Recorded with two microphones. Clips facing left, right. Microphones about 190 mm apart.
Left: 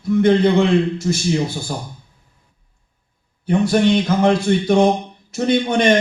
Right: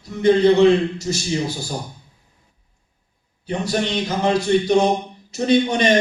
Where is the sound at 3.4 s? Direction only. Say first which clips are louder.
Left 7 dB; 55° left (ahead or behind).